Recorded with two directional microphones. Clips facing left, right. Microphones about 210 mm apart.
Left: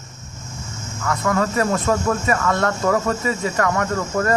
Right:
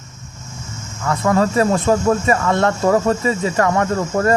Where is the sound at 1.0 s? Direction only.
30° right (ahead or behind).